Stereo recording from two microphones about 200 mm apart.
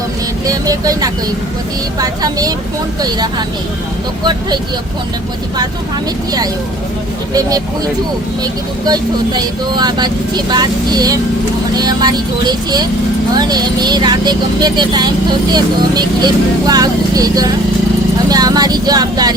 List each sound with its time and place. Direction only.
0.4 s speech: 20° right (ahead or behind)
8.9 s speech: 20° right (ahead or behind)